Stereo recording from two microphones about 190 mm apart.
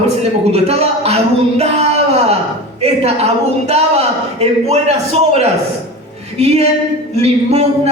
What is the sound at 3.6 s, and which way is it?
A man's voice, 35° right (ahead or behind).